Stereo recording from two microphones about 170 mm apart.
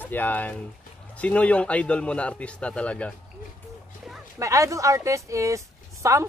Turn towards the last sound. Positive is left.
turn(degrees=-20)  # may be behind; listen again after turning